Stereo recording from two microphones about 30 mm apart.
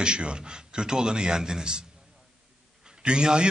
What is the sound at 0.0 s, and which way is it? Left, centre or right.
A man's voice, right.